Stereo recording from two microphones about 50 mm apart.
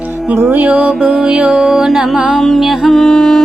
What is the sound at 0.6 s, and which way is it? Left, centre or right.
Music, right.